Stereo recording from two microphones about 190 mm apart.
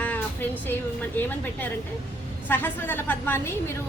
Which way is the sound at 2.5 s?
10° left (ahead or behind).